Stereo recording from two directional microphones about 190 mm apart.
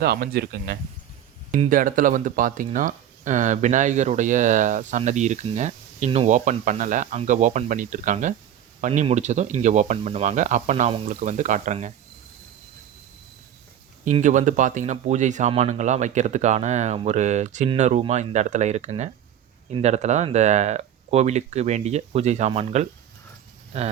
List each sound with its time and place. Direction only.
0.0 s speech: 55° right (ahead or behind)
1.5 s speech: 40° right (ahead or behind)
14.0 s speech: 40° right (ahead or behind)